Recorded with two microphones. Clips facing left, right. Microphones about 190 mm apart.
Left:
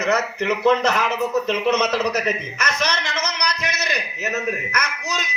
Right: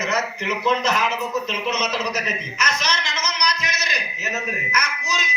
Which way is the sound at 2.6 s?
60° left (ahead or behind).